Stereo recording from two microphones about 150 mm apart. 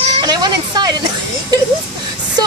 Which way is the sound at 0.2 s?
30° right (ahead or behind).